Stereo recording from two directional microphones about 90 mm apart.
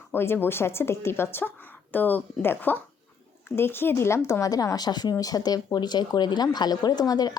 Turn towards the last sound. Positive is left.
turn(degrees=50)  # may be behind; listen again after turning